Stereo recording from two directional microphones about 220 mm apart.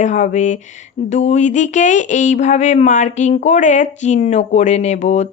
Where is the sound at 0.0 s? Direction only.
35° left (ahead or behind).